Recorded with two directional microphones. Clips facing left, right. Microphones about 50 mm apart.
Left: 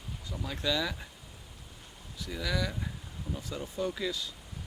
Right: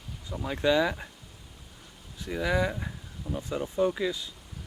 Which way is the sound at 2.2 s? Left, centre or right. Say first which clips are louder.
Right 6 dB; right.